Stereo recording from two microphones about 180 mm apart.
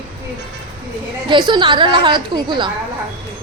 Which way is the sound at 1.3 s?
25° right (ahead or behind).